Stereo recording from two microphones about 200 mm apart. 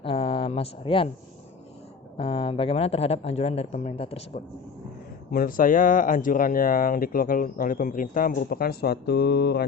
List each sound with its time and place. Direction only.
0.0 s a sound: 25° left (ahead or behind)
2.1 s a man's voice: 25° left (ahead or behind)
5.3 s speech: 45° left (ahead or behind)